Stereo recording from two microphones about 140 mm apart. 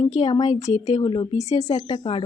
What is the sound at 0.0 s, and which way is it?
A woman's voice, 45° left (ahead or behind).